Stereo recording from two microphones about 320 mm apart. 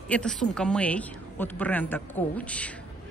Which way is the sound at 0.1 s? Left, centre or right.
Centre.